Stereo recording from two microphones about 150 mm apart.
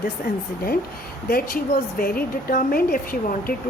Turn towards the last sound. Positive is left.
turn(degrees=75)  # may be behind; listen again after turning